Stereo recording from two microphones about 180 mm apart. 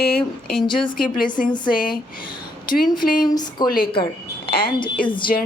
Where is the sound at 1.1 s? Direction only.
50° left (ahead or behind).